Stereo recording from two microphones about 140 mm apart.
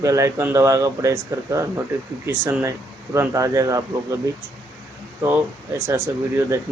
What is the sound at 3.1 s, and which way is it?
Speech, 20° right (ahead or behind).